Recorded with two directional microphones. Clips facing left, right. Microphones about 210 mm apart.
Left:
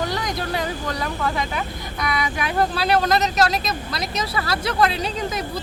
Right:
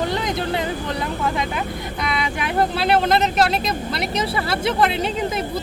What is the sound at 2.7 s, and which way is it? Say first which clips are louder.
Speech: right 3 dB; 25° right (ahead or behind).